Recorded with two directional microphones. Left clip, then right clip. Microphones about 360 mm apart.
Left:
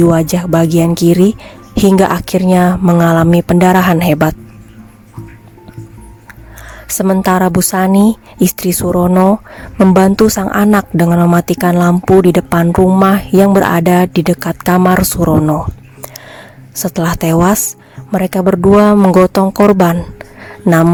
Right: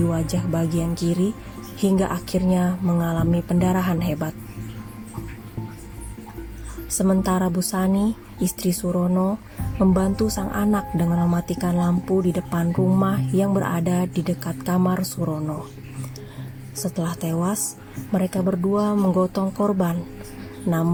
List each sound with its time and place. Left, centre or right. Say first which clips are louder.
0.1 s a woman's voice: left 14 dB; left
6.9 s a woman's voice: left 11 dB; left
16.8 s a woman's voice: left 13 dB; left